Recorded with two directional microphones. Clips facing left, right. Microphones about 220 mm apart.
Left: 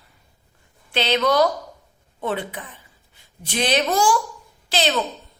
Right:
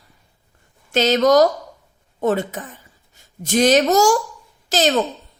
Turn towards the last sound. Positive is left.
turn(degrees=-45)  # may be behind; listen again after turning